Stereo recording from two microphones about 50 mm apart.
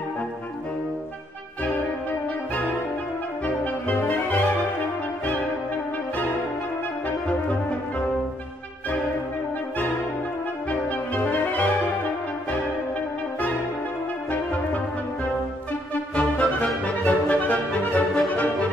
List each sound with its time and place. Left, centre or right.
3.4 s music: left
10.7 s music: left
15.9 s music: left